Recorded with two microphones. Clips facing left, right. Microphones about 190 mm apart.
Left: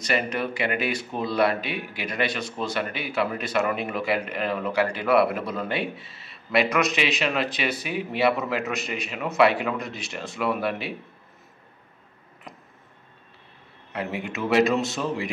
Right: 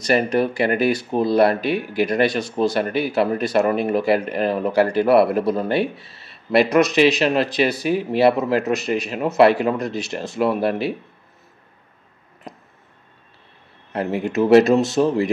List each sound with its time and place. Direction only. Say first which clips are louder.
0.0 s speech: right 8 dB; 40° right (ahead or behind)
13.9 s speech: right 9 dB; 40° right (ahead or behind)